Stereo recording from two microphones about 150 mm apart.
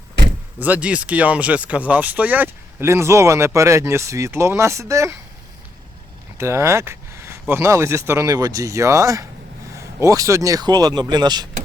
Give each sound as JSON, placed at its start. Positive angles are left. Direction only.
{"t": 0.6, "sound": "speech", "side_deg": -10}
{"t": 6.3, "sound": "speech", "side_deg": -20}